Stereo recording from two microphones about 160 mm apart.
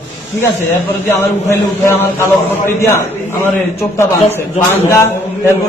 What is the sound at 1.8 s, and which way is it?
A man's voice, 15° left (ahead or behind).